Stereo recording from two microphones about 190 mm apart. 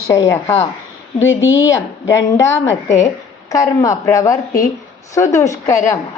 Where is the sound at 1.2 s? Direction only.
90° left.